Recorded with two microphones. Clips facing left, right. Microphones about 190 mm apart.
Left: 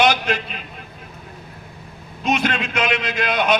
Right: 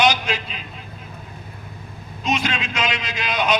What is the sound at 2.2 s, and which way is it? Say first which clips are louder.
A man's voice: left 3 dB; 60° left (ahead or behind).